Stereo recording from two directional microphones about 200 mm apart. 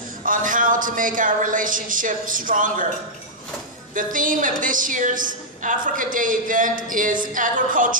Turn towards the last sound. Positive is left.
turn(degrees=-40)  # may be behind; listen again after turning